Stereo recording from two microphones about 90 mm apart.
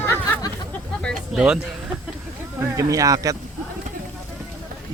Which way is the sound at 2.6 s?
35° right (ahead or behind).